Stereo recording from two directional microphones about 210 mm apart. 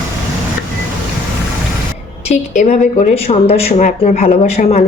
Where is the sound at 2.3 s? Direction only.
35° left (ahead or behind).